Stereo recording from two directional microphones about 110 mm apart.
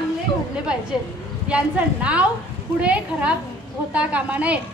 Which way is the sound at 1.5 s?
10° right (ahead or behind).